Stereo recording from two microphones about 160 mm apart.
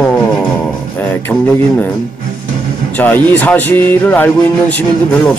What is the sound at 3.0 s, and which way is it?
Speech, 10° left (ahead or behind).